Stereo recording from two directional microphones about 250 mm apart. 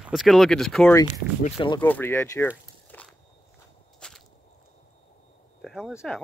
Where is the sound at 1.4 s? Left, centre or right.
Left.